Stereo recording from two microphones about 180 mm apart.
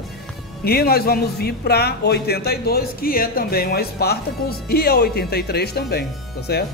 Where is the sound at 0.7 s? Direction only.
60° left (ahead or behind).